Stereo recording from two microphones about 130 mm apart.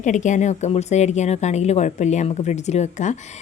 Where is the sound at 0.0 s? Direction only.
70° left (ahead or behind).